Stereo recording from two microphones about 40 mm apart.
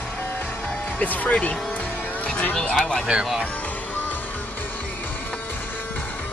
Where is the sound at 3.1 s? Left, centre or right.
Centre.